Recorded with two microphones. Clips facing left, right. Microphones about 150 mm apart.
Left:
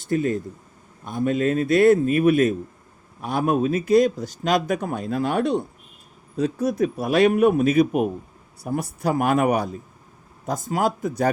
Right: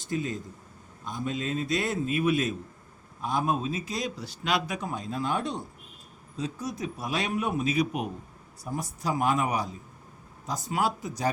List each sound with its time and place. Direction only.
0.0 s speech: 55° left (ahead or behind)
3.2 s speech: 65° left (ahead or behind); by 8.1 s 50° left (ahead or behind)
8.6 s speech: 65° left (ahead or behind)